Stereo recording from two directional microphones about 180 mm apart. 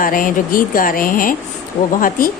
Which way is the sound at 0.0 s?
50° left (ahead or behind).